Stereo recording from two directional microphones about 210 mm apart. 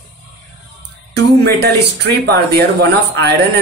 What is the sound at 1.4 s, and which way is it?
Speech, 50° right (ahead or behind).